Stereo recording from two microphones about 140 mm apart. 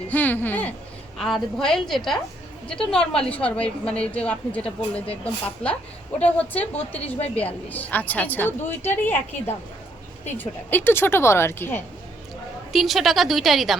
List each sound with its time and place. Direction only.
0.1 s a woman's voice: 10° left (ahead or behind)
12.7 s a woman's voice: centre (ahead or behind)